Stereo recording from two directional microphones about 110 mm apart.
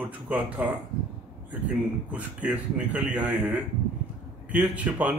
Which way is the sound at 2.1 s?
10° right (ahead or behind).